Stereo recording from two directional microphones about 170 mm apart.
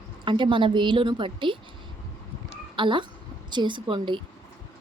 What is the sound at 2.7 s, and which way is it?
A woman's voice, 30° right (ahead or behind).